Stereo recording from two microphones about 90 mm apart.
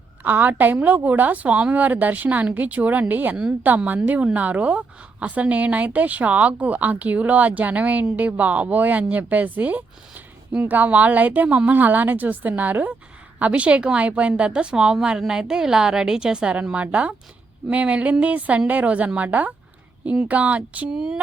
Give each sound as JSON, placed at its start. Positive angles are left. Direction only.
{"t": 0.2, "sound": "a woman's voice", "side_deg": -20}